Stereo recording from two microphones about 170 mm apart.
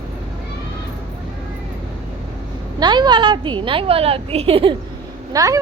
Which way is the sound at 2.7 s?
25° right (ahead or behind).